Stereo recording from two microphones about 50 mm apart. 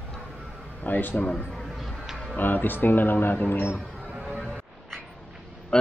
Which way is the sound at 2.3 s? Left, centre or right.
Left.